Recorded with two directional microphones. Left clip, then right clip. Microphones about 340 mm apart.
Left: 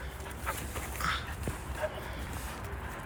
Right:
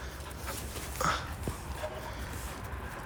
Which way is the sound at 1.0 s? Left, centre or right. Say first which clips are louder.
Right 3 dB; centre.